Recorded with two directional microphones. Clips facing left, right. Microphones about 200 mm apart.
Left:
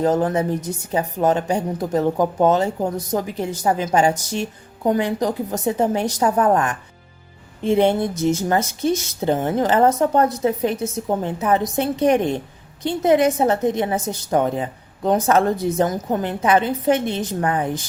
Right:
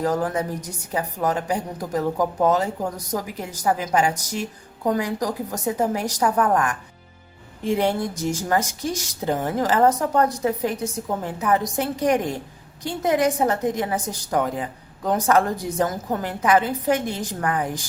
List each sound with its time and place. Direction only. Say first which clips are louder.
0.0 s a woman's voice: left 4 dB; 25° left (ahead or behind)